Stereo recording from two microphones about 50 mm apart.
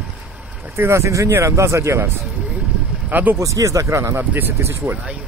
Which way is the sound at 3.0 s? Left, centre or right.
Right.